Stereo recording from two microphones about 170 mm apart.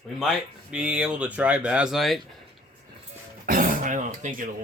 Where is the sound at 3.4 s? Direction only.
55° right (ahead or behind).